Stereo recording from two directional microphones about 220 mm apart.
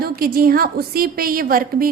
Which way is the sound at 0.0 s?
40° right (ahead or behind).